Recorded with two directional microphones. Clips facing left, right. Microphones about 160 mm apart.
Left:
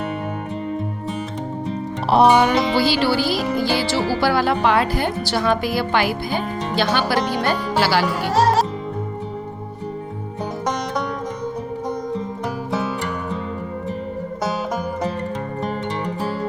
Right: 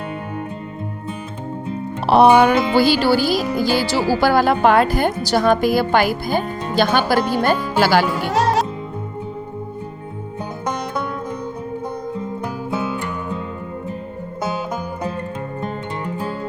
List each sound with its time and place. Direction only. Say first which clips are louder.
2.0 s a woman's voice: right 3 dB; 60° right (ahead or behind)